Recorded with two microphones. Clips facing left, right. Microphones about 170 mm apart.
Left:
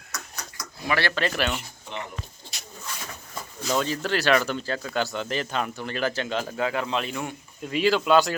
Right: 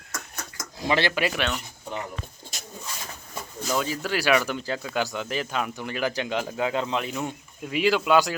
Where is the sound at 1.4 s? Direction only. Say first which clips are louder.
Left 1 dB; centre (ahead or behind).